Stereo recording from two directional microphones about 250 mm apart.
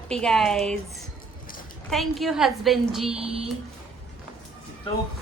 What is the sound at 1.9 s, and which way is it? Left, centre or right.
A woman's voice, centre.